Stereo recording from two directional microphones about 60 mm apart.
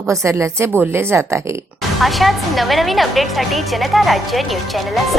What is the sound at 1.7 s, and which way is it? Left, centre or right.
Speech, centre.